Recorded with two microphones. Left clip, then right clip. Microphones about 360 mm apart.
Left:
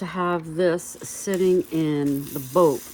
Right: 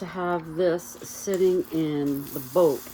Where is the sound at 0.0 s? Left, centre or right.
Left.